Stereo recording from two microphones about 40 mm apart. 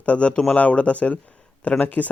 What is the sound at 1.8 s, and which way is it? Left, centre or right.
Speech, left.